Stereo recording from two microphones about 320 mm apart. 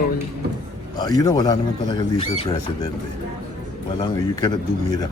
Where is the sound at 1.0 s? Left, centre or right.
Centre.